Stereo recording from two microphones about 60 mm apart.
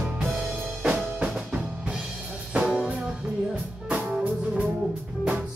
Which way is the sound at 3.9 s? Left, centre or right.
Right.